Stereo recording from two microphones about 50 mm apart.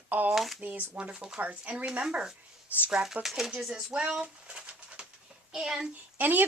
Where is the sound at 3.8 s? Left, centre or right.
Centre.